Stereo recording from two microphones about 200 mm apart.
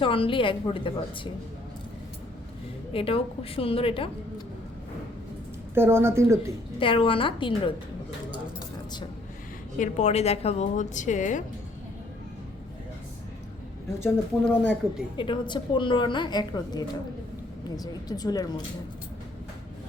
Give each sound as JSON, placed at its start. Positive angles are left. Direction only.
{"t": 0.0, "sound": "a woman's voice", "side_deg": 25}
{"t": 2.9, "sound": "a woman's voice", "side_deg": 30}
{"t": 5.7, "sound": "speech", "side_deg": -10}
{"t": 6.7, "sound": "a woman's voice", "side_deg": 25}
{"t": 8.5, "sound": "vehicle", "side_deg": 20}
{"t": 9.7, "sound": "a woman's voice", "side_deg": 35}
{"t": 14.0, "sound": "speech", "side_deg": 10}
{"t": 15.2, "sound": "a woman's voice", "side_deg": 25}